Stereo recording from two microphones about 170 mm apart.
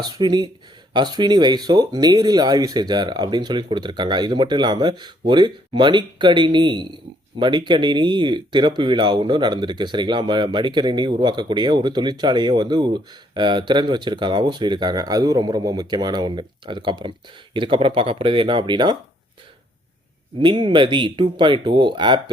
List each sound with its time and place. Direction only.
0.0 s speech: 25° right (ahead or behind)
20.4 s speech: 30° right (ahead or behind)